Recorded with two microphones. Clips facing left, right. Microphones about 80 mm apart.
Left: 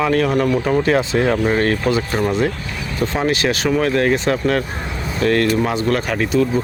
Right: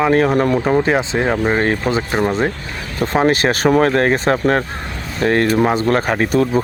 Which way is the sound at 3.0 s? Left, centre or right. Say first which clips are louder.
Right 4 dB; right.